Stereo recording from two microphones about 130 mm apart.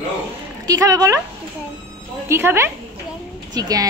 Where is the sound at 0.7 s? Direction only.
25° right (ahead or behind).